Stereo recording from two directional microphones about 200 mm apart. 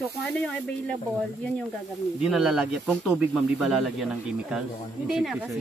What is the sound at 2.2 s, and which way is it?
Speech, centre (ahead or behind).